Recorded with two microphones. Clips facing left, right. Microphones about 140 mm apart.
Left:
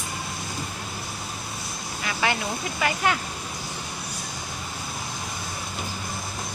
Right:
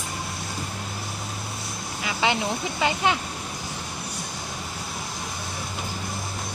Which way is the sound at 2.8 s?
20° right (ahead or behind).